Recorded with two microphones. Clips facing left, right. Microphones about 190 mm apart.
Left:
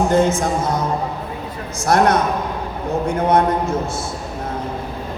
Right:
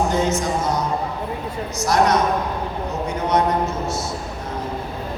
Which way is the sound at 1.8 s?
55° left (ahead or behind).